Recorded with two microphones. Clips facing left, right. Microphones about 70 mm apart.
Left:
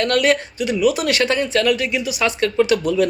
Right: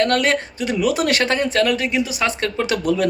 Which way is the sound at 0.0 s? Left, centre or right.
Right.